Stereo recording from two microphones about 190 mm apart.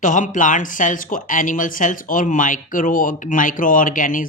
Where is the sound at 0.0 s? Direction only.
45° left (ahead or behind).